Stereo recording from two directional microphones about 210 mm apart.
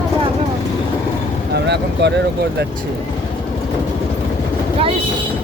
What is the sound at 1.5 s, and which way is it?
Vehicle, 55° right (ahead or behind).